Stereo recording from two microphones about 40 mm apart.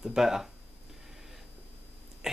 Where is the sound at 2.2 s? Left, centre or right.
Centre.